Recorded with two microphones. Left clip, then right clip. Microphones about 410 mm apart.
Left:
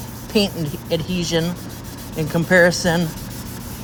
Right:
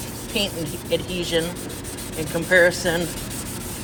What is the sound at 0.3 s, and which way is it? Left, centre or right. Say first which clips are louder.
Speech: left 5 dB; centre.